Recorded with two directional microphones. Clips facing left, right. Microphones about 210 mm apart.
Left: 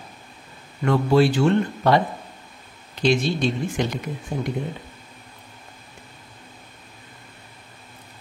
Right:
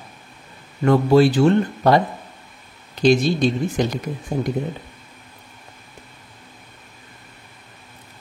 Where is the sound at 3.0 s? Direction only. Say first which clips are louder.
Right 4 dB; 40° right (ahead or behind).